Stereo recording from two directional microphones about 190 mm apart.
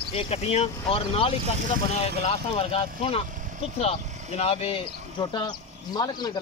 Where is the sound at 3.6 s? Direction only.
30° left (ahead or behind).